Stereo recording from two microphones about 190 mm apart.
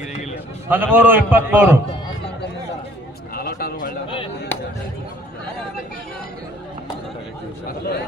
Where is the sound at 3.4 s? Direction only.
55° left (ahead or behind).